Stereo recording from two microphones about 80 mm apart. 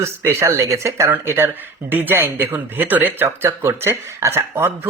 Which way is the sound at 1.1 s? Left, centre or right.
Right.